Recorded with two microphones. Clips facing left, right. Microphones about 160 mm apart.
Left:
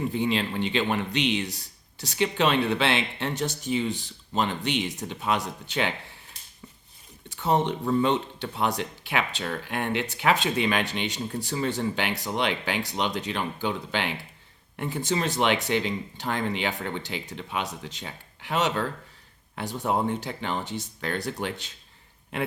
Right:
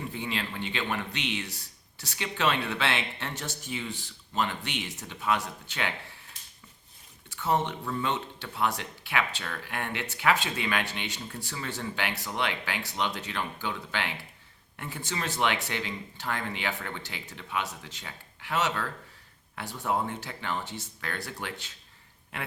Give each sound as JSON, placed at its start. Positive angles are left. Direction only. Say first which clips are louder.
{"t": 0.1, "sound": "speech", "louder": "left 8 dB", "side_deg": 20}
{"t": 7.3, "sound": "speech", "louder": "left 4 dB", "side_deg": 20}